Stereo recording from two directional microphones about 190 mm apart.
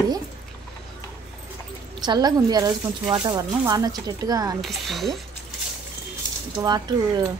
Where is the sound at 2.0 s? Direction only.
20° right (ahead or behind).